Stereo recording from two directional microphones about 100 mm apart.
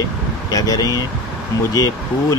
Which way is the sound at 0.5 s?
40° left (ahead or behind).